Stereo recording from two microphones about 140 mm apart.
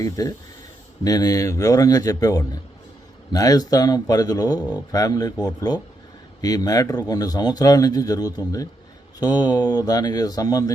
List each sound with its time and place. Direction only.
0.0 s speech: 25° left (ahead or behind)